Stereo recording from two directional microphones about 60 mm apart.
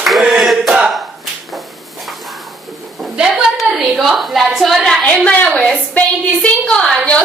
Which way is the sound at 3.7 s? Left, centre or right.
Centre.